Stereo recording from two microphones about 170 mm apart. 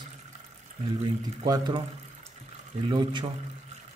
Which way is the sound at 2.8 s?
25° right (ahead or behind).